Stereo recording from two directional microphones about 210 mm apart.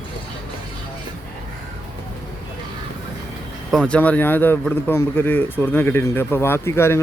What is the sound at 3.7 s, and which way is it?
Speech, 5° left (ahead or behind).